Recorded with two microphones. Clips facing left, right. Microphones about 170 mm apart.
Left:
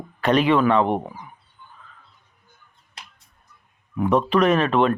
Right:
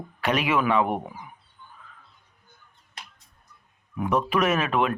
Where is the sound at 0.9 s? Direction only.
30° left (ahead or behind).